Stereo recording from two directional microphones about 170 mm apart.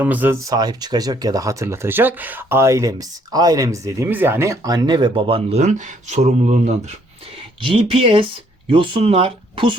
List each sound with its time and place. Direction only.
0.0 s speech: 10° right (ahead or behind); by 6.7 s 40° right (ahead or behind)
7.6 s speech: 30° right (ahead or behind)